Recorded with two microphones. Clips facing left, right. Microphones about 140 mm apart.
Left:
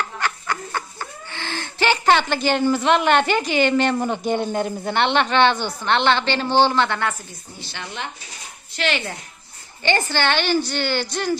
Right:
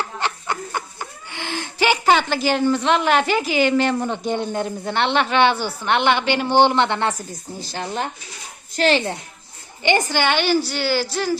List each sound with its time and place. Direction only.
0.0 s speech: 25° right (ahead or behind)
7.1 s speech: 40° right (ahead or behind)
9.8 s a woman's voice: 15° right (ahead or behind)